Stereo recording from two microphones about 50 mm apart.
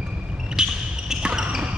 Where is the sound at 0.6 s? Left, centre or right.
Centre.